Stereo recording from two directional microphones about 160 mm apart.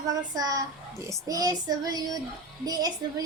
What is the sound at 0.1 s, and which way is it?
Child singing, 25° right (ahead or behind).